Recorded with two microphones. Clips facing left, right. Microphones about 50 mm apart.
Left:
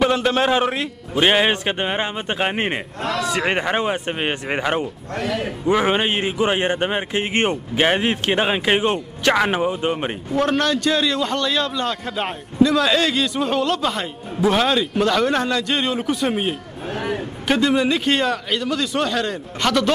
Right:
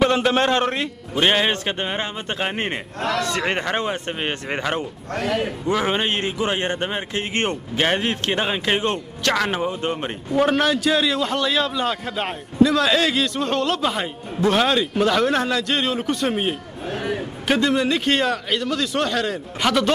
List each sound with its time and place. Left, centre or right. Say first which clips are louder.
0.0 s a man's voice: even; centre
3.0 s a man's voice: right 2 dB; right
3.3 s a man's voice: left 2 dB; centre
5.1 s a man's voice: right 1 dB; right
5.7 s a man's voice: left 4 dB; centre
10.3 s a man's voice: right 1 dB; centre